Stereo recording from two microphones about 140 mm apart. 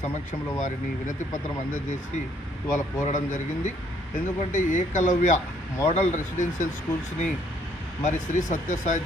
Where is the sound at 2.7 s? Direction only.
60° left (ahead or behind).